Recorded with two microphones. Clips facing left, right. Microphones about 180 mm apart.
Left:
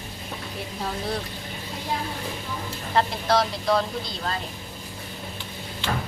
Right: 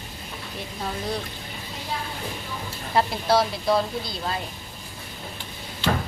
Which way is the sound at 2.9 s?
10° right (ahead or behind).